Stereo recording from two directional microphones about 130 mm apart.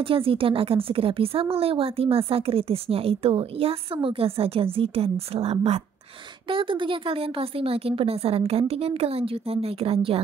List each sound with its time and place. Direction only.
0.0 s speech: 45° right (ahead or behind)
6.5 s speech: 40° right (ahead or behind)